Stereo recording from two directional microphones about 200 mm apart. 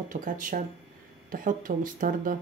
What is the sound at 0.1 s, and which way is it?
Speech, 40° right (ahead or behind).